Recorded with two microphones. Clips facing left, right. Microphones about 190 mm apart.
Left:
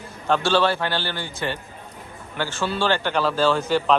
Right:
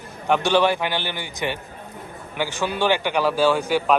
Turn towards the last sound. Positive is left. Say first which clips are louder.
# right 1 dB
turn(degrees=-10)  # may be behind; listen again after turning